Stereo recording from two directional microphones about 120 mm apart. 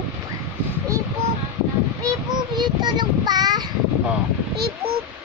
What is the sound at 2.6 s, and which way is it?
Child singing, 35° right (ahead or behind).